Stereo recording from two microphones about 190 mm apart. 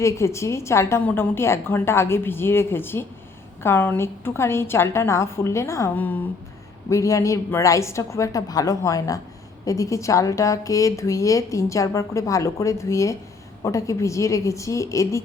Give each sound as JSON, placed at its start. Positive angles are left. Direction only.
{"t": 0.0, "sound": "speech", "side_deg": 15}